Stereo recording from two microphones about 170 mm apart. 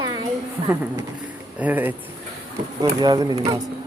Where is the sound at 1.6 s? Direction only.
10° right (ahead or behind).